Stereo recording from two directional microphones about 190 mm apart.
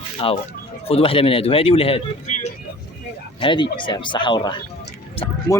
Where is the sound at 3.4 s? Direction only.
25° left (ahead or behind).